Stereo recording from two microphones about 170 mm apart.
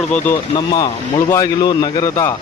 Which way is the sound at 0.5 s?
25° left (ahead or behind).